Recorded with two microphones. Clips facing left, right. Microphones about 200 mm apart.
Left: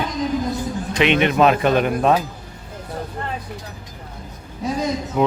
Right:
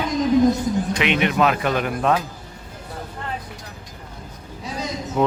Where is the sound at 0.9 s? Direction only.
25° left (ahead or behind).